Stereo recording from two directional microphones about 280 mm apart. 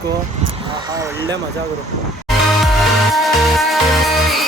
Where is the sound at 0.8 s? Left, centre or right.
Centre.